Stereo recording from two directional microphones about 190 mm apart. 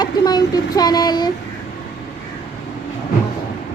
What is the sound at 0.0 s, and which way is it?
Speech, 20° left (ahead or behind).